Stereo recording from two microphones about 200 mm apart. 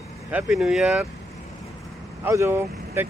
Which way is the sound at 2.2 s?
15° right (ahead or behind).